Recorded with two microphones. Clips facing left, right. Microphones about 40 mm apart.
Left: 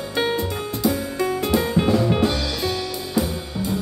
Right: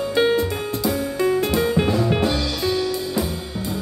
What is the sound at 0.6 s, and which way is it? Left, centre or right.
Music, right.